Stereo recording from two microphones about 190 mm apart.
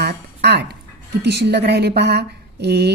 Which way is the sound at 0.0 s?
60° right (ahead or behind).